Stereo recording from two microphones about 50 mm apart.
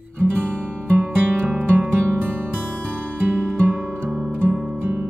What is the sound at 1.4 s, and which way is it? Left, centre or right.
Music, right.